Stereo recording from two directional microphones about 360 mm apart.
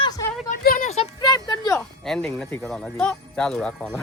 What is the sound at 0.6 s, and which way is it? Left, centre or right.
Speech, left.